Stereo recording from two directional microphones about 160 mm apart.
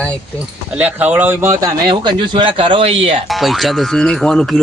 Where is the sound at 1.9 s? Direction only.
30° right (ahead or behind).